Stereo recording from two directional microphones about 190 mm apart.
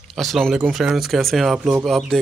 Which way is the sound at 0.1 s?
Centre (ahead or behind).